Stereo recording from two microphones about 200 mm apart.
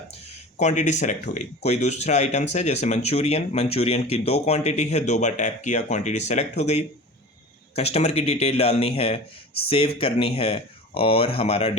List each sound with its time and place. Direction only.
0.6 s speech: 35° left (ahead or behind)